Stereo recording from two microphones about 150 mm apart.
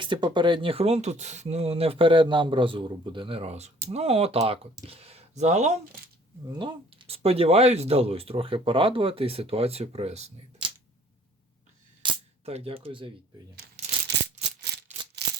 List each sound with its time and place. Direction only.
0.0 s speech: 30° right (ahead or behind); by 5.7 s 50° right (ahead or behind)
6.5 s speech: 30° right (ahead or behind)
12.0 s cap gun: 40° right (ahead or behind)